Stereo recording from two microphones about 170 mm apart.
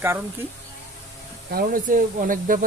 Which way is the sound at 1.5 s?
60° right (ahead or behind).